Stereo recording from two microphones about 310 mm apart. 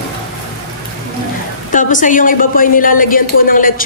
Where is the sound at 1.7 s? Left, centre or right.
Left.